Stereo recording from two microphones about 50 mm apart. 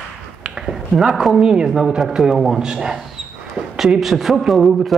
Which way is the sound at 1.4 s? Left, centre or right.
Centre.